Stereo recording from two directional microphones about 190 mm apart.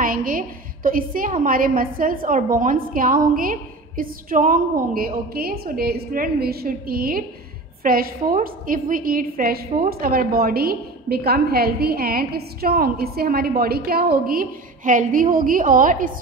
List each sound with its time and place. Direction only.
0.0 s a woman's voice: 45° right (ahead or behind)